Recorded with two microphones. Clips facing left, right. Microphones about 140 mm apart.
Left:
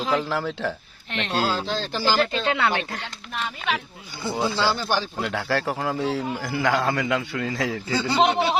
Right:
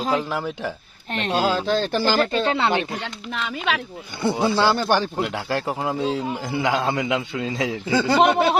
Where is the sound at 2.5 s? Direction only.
25° right (ahead or behind).